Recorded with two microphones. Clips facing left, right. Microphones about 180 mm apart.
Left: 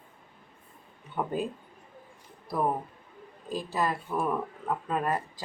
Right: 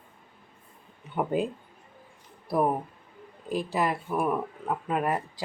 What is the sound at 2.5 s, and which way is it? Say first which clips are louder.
Speech: right 3 dB; 10° right (ahead or behind).